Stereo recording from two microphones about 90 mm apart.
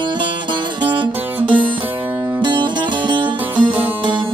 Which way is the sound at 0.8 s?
60° right (ahead or behind).